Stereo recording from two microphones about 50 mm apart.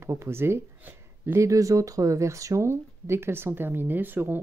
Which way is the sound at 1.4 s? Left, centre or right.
Right.